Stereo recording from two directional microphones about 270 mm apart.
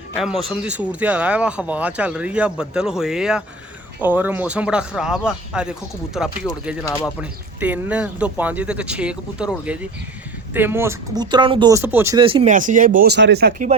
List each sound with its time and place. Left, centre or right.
0.1 s speech: centre
6.8 s speech: centre
7.2 s speech: centre; by 13.7 s right